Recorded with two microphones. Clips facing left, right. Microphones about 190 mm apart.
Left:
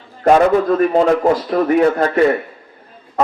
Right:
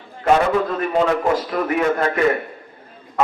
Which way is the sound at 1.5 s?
35° left (ahead or behind).